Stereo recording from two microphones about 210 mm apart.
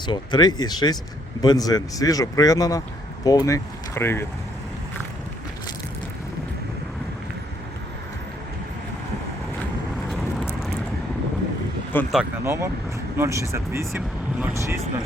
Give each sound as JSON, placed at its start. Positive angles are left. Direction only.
{"t": 0.0, "sound": "speech", "side_deg": 20}
{"t": 11.9, "sound": "speech", "side_deg": 10}
{"t": 12.5, "sound": "speech", "side_deg": -15}